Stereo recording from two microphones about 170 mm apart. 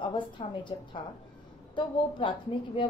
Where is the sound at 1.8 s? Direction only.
30° left (ahead or behind).